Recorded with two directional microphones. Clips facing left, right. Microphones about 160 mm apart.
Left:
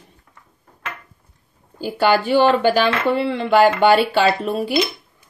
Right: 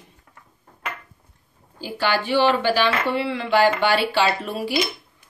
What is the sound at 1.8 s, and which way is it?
Speech, 45° left (ahead or behind).